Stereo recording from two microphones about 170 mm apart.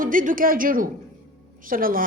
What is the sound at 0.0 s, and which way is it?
Speech, 55° right (ahead or behind).